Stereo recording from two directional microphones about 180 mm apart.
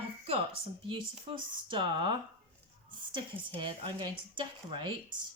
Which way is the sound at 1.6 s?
25° right (ahead or behind).